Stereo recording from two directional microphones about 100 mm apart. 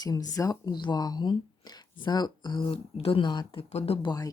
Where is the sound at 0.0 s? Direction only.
40° left (ahead or behind).